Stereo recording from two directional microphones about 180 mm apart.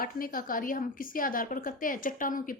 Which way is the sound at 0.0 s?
50° left (ahead or behind).